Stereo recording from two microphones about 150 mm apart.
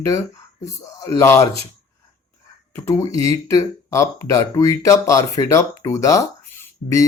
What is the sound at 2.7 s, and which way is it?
Speech, 20° left (ahead or behind).